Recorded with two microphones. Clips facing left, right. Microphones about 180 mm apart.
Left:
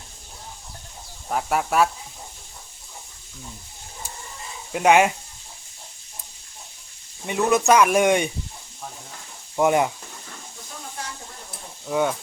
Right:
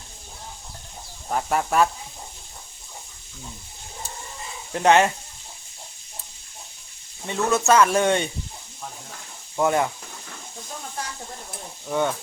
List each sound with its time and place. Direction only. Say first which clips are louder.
1.3 s speech: even; 5° left (ahead or behind)
4.7 s speech: left 1 dB; 10° left (ahead or behind)
7.3 s speech: left 2 dB; 15° left (ahead or behind)
9.6 s speech: left 2 dB; 15° left (ahead or behind)
11.9 s speech: left 1 dB; 5° left (ahead or behind)